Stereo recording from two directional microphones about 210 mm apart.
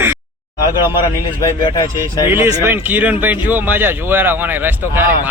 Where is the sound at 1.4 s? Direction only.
20° left (ahead or behind).